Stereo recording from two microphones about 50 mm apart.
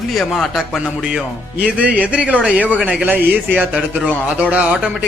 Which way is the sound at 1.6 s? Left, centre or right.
Right.